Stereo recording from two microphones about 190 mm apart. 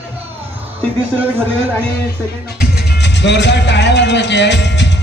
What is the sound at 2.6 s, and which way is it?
Music, 65° left (ahead or behind).